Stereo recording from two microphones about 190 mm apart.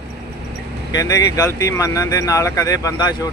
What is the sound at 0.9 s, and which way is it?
Speech, 20° left (ahead or behind).